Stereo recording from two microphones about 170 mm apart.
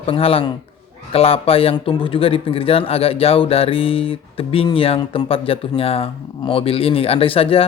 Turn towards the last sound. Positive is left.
turn(degrees=35)  # may be behind; listen again after turning